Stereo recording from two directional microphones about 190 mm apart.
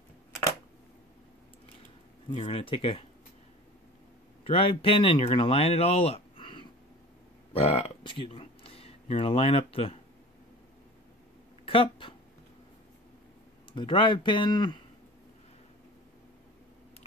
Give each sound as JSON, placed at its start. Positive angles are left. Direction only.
{"t": 2.3, "sound": "speech", "side_deg": 30}
{"t": 4.5, "sound": "speech", "side_deg": 30}
{"t": 11.6, "sound": "a sound", "side_deg": 30}
{"t": 13.7, "sound": "speech", "side_deg": 25}